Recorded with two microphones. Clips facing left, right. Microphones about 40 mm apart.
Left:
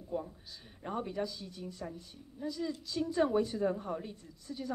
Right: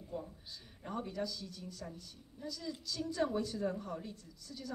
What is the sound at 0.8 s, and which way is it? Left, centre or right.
A woman's voice, left.